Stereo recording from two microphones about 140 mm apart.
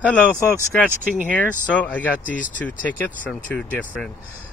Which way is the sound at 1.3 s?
10° left (ahead or behind).